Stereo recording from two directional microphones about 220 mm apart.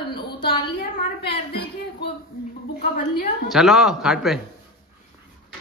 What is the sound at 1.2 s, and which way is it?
Speech, 50° left (ahead or behind).